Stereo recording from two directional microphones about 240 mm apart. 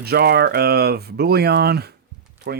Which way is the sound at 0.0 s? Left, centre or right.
Right.